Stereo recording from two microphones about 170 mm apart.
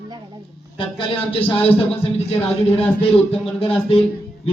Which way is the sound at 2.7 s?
35° left (ahead or behind).